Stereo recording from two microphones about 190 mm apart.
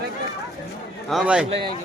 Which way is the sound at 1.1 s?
5° right (ahead or behind).